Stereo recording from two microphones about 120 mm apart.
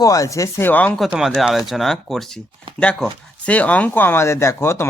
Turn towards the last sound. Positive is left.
turn(degrees=20)  # may be behind; listen again after turning